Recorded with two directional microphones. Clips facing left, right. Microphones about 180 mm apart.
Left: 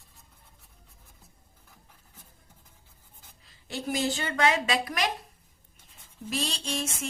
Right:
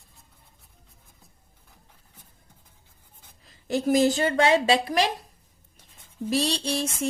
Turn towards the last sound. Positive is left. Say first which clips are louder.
# right 6 dB
turn(degrees=-35)  # may be behind; listen again after turning